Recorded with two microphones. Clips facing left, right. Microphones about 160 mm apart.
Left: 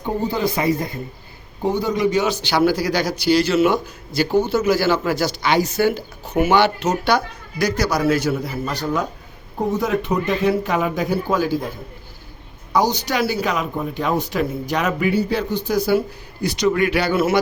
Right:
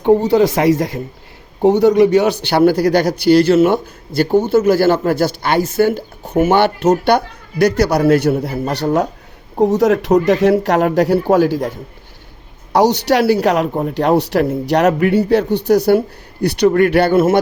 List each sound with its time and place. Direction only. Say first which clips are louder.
0.0 s speech: right 10 dB; 75° right (ahead or behind)
1.6 s a man's voice: right 9 dB; 75° right (ahead or behind); by 17.4 s 50° right (ahead or behind)